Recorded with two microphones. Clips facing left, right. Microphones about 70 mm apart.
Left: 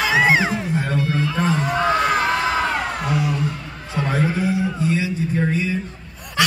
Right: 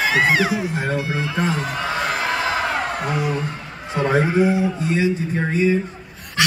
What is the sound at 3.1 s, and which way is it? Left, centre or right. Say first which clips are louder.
A man's voice: left 1 dB; right.